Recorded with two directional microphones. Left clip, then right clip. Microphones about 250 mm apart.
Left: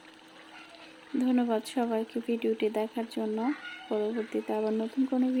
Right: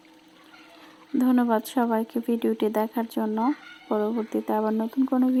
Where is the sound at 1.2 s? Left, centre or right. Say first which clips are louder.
Right 6 dB; centre.